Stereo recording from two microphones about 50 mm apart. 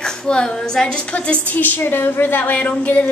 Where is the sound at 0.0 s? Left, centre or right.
Centre.